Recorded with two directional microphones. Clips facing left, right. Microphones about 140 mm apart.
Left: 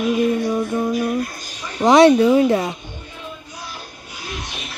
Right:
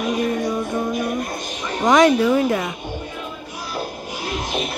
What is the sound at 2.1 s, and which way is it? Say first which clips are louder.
Speech: left 3 dB; 25° left (ahead or behind).